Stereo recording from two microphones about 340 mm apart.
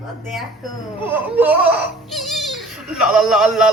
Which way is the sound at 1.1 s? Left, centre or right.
Centre.